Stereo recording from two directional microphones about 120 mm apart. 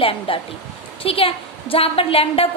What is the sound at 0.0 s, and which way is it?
A woman's voice, 50° left (ahead or behind).